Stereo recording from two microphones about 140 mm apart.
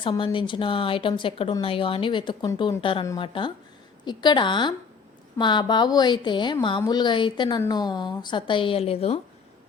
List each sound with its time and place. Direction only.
0.0 s a woman's voice: 35° left (ahead or behind)